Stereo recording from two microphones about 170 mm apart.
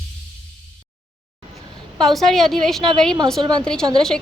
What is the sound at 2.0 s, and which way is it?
A woman's voice, centre (ahead or behind).